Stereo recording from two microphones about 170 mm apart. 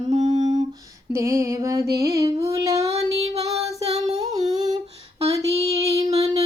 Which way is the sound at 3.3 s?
40° right (ahead or behind).